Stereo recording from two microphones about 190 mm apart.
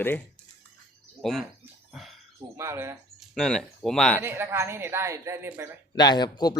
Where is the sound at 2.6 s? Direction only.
15° right (ahead or behind).